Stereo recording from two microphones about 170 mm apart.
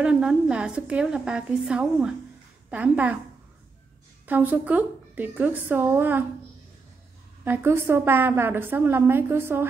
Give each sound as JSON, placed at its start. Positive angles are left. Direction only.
{"t": 0.0, "sound": "a woman's voice", "side_deg": -5}
{"t": 4.3, "sound": "a woman's voice", "side_deg": -10}
{"t": 7.4, "sound": "a woman's voice", "side_deg": -15}